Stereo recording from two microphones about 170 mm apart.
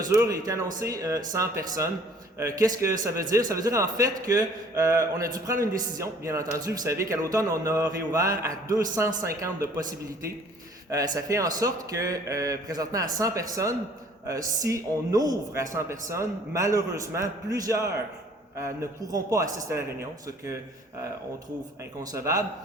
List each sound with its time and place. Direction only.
0.1 s a man's voice: 20° right (ahead or behind)
10.9 s a man's voice: 20° right (ahead or behind)
22.1 s a man's voice: 20° right (ahead or behind)